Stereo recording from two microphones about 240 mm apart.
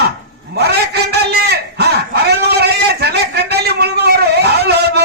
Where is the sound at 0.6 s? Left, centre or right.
Right.